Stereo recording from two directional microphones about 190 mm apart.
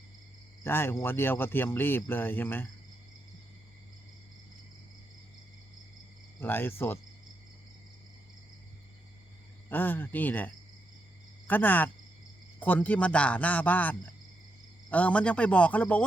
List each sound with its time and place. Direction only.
0.6 s speech: 10° left (ahead or behind)
6.4 s speech: 10° left (ahead or behind)
9.6 s speech: 10° left (ahead or behind)